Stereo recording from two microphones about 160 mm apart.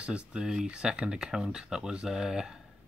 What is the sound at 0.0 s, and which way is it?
Speech, 5° right (ahead or behind).